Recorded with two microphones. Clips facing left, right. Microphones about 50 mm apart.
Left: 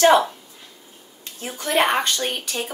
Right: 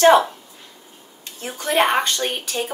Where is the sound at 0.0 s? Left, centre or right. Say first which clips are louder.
Right 2 dB; centre.